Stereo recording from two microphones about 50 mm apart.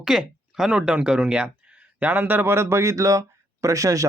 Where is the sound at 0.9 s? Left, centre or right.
Right.